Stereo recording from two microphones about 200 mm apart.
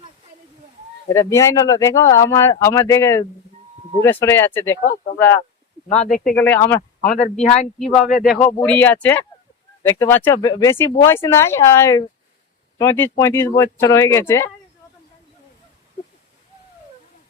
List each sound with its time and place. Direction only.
1.1 s speech: 15° left (ahead or behind)
5.9 s speech: 35° left (ahead or behind)
6.2 s speech: 10° left (ahead or behind)
7.0 s speech: 40° left (ahead or behind)
7.8 s speech: centre (ahead or behind)